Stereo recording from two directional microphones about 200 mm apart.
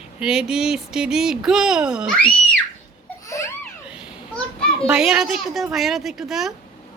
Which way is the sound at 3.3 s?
15° left (ahead or behind).